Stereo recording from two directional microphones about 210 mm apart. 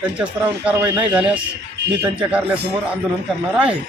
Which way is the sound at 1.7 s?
55° right (ahead or behind).